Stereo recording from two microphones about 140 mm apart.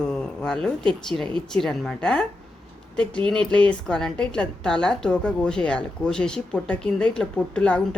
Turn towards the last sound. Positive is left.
turn(degrees=10)  # may be behind; listen again after turning